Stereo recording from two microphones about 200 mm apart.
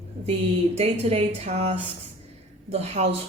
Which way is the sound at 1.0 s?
30° right (ahead or behind).